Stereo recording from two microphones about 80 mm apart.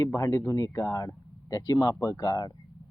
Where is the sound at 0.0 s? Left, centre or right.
Left.